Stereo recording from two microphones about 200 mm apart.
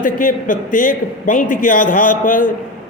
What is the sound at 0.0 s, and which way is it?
A man's voice, 40° left (ahead or behind).